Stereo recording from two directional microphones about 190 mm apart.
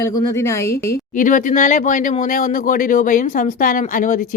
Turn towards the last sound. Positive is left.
turn(degrees=45)  # may be behind; listen again after turning